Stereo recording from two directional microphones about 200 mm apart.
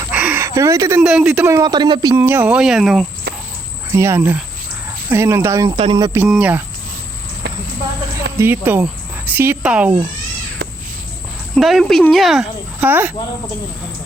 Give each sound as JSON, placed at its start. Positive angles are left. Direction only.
{"t": 0.1, "sound": "speech", "side_deg": -10}
{"t": 3.9, "sound": "speech", "side_deg": -15}
{"t": 5.7, "sound": "speech", "side_deg": -25}
{"t": 6.1, "sound": "speech", "side_deg": -5}
{"t": 7.4, "sound": "a sound", "side_deg": -60}
{"t": 8.1, "sound": "speech", "side_deg": -10}
{"t": 10.6, "sound": "crow", "side_deg": -50}
{"t": 11.5, "sound": "speech", "side_deg": 0}